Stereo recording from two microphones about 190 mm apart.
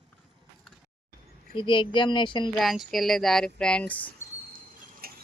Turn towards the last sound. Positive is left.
turn(degrees=-50)  # may be behind; listen again after turning